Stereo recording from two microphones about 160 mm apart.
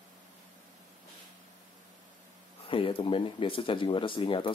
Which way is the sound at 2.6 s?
35° left (ahead or behind).